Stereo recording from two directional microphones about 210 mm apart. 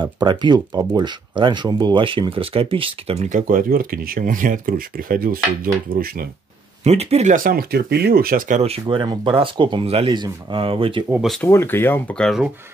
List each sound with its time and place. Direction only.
0.0 s speech: 20° right (ahead or behind); by 6.2 s 45° right (ahead or behind)
6.8 s speech: 30° right (ahead or behind)
11.1 s speech: centre (ahead or behind)